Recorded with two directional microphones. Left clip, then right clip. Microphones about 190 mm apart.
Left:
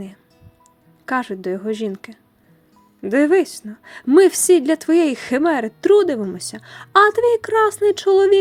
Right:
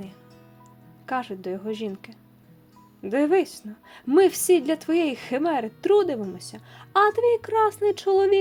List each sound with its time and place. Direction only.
1.0 s a woman's voice: 25° left (ahead or behind)